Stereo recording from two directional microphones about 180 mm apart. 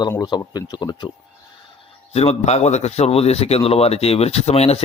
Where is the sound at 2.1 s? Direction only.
35° left (ahead or behind).